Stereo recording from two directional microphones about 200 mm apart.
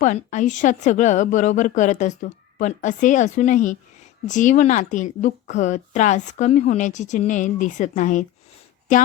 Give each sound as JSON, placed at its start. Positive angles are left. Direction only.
{"t": 0.0, "sound": "a woman's voice", "side_deg": 40}